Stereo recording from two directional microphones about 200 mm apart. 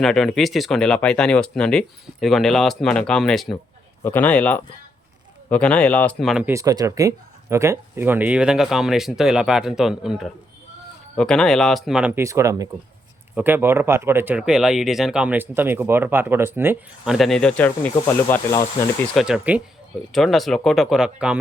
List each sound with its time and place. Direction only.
0.0 s speech: centre (ahead or behind)
6.5 s speech: 15° right (ahead or behind)
17.2 s speech: centre (ahead or behind)
19.1 s speech: 5° right (ahead or behind)